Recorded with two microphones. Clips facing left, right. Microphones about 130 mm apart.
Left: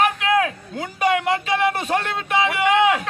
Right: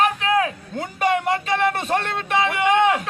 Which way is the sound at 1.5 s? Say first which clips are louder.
Even; 5° left (ahead or behind).